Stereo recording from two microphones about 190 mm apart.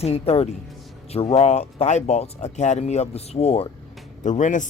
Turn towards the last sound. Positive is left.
turn(degrees=40)  # may be behind; listen again after turning